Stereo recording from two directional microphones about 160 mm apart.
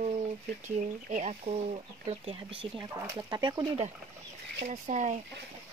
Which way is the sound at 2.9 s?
20° right (ahead or behind).